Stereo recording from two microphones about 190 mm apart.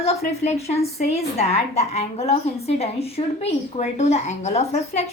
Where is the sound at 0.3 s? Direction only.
35° left (ahead or behind).